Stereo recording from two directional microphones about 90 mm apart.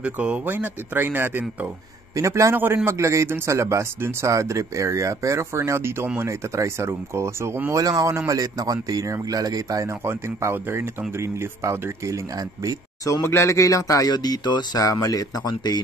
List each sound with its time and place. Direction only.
0.0 s speech: 10° right (ahead or behind)
0.5 s speech: 25° right (ahead or behind)
2.1 s a man's voice: 35° right (ahead or behind)
7.7 s a man's voice: 40° right (ahead or behind)
10.0 s a man's voice: 25° right (ahead or behind)
13.0 s speech: 35° left (ahead or behind); by 14.8 s 50° left (ahead or behind)
14.8 s speech: 40° left (ahead or behind)